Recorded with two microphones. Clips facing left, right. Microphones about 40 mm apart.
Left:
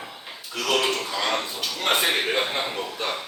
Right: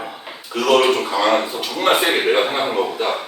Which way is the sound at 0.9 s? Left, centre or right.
Right.